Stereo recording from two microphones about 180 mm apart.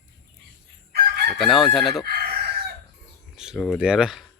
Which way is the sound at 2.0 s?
60° right (ahead or behind).